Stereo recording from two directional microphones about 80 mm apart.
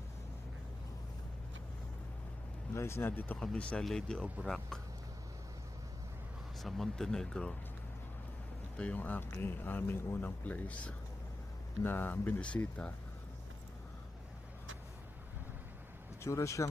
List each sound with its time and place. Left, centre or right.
2.7 s speech: left
3.1 s speech: left
3.8 s speech: centre
6.6 s speech: centre
8.7 s speech: centre
11.8 s speech: left
12.4 s speech: centre
16.3 s speech: left